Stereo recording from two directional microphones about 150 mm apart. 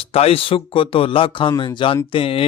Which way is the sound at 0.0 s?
40° left (ahead or behind).